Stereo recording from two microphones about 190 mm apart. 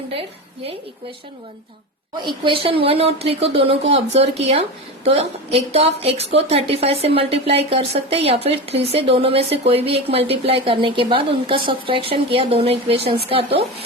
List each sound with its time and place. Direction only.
2.2 s a woman's voice: 25° right (ahead or behind)